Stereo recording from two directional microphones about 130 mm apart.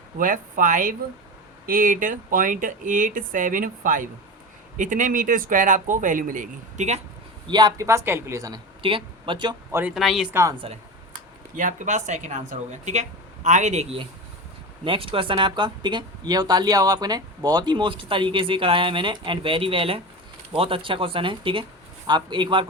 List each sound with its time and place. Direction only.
0.2 s speech: 90° right; by 7.0 s 65° right (ahead or behind)
7.5 s speech: 30° right (ahead or behind)
8.8 s speech: 45° right (ahead or behind)
9.9 s speech: 5° right (ahead or behind)
10.6 s speech: 45° right (ahead or behind)
11.5 s speech: 85° right; by 22.6 s 40° right (ahead or behind)